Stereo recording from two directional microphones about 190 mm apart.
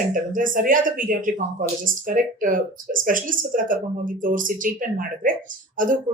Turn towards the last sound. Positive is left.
turn(degrees=-45)  # may be behind; listen again after turning